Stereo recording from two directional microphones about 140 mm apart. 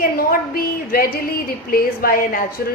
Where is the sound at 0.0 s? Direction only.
90° left.